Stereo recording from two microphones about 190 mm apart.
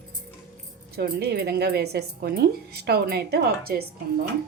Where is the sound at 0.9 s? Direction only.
55° right (ahead or behind).